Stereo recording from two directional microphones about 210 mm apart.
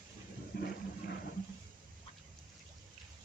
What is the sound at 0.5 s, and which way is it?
Toilet flush, 50° left (ahead or behind).